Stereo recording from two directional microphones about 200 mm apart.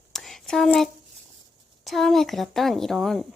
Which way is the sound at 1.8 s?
Centre (ahead or behind).